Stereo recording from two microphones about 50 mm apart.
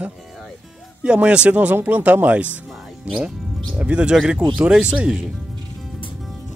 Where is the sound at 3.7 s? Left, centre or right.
Right.